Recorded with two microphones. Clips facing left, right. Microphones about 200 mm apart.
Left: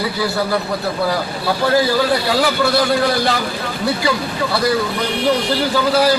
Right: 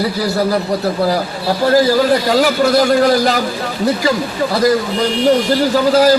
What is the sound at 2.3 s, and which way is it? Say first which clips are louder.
A man's voice: right 4 dB; 40° right (ahead or behind).